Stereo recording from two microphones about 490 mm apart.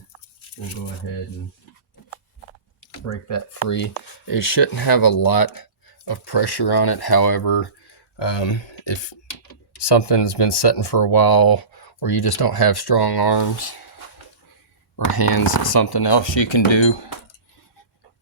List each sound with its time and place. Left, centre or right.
3.1 s speech: left
14.9 s speech: left